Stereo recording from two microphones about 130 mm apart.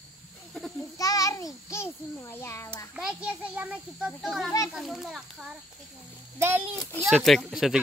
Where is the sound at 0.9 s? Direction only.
25° left (ahead or behind).